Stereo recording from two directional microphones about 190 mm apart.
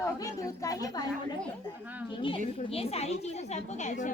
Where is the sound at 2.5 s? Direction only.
30° left (ahead or behind).